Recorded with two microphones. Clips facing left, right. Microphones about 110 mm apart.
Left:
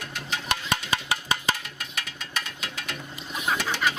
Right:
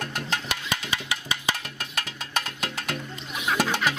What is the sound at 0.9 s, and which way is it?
Music, 40° left (ahead or behind).